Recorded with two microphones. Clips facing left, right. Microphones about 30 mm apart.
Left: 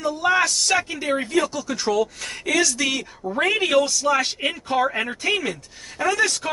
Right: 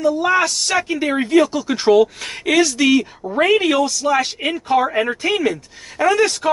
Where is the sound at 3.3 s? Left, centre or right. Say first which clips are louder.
Right 4 dB; centre.